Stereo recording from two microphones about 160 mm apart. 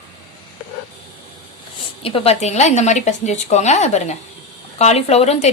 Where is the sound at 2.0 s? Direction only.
35° left (ahead or behind).